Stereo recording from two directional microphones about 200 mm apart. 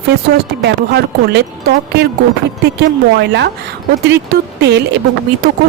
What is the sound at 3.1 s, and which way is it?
Speech, 60° right (ahead or behind).